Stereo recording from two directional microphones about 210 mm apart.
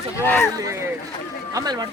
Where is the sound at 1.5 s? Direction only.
20° right (ahead or behind).